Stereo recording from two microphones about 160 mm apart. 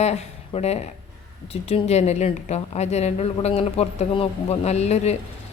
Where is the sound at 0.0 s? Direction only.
45° left (ahead or behind).